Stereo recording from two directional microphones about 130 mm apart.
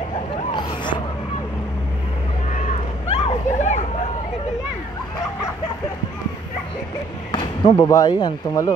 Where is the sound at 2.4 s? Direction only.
70° left (ahead or behind).